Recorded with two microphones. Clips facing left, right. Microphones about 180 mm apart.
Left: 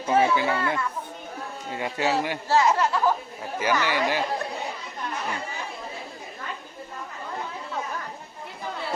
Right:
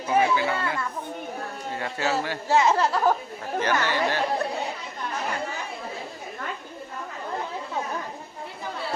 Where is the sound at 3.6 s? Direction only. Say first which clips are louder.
Even; 10° left (ahead or behind).